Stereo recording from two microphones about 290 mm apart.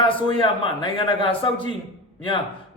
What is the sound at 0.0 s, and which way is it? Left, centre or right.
Speech, centre.